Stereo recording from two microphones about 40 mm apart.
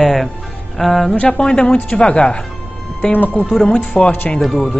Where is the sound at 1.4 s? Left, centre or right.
Left.